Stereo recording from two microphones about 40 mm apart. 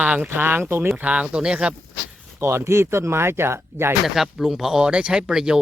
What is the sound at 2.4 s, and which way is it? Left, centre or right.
Speech, right.